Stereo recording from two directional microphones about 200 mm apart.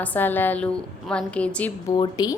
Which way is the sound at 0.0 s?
10° left (ahead or behind).